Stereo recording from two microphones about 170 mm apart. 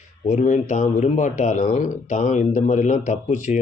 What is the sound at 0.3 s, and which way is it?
A man's voice, 45° left (ahead or behind).